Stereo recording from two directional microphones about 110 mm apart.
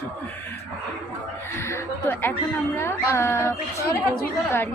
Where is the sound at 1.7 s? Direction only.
20° left (ahead or behind).